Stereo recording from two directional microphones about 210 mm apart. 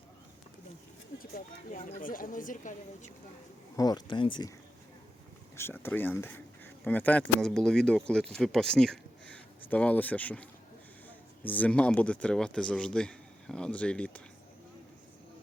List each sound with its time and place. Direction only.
1.2 s speech: 40° left (ahead or behind)
3.8 s speech: 20° left (ahead or behind)
5.5 s speech: 10° left (ahead or behind)